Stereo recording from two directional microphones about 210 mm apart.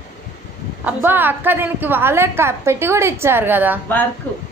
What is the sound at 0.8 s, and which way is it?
A woman's voice, 10° right (ahead or behind).